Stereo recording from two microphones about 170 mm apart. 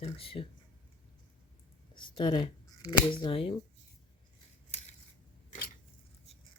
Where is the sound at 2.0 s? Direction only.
30° left (ahead or behind).